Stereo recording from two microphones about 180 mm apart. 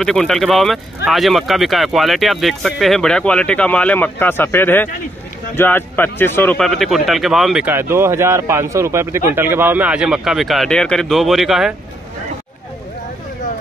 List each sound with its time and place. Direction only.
0.0 s speech: centre (ahead or behind)